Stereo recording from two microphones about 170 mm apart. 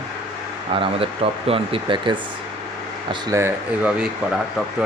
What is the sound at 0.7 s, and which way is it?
Speech, 30° right (ahead or behind).